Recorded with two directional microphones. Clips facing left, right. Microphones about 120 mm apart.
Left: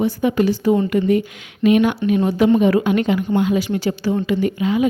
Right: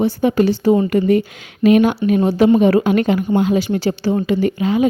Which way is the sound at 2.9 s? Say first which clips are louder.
Right 2 dB; 45° right (ahead or behind).